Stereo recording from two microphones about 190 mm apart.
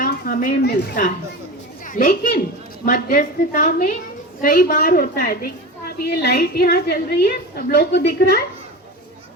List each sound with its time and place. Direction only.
0.0 s a woman's voice: 50° left (ahead or behind)